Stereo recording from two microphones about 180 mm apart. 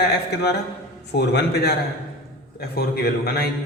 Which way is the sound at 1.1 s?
65° left (ahead or behind).